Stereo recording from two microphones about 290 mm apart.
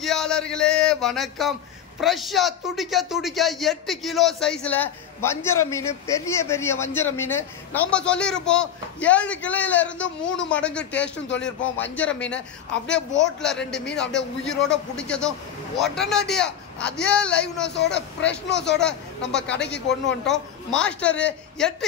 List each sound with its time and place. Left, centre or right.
0.0 s a man's voice: centre
10.0 s a man's voice: left
10.5 s a man's voice: centre
12.9 s a man's voice: left
13.4 s a man's voice: centre
17.6 s a man's voice: left
18.8 s a man's voice: centre
19.6 s a man's voice: left
20.2 s a man's voice: centre